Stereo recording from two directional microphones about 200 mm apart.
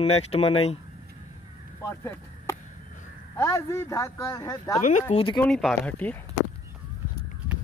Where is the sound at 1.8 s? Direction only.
15° left (ahead or behind).